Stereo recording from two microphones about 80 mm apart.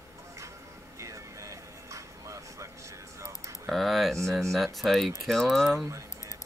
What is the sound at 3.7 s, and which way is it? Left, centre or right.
Speech, centre.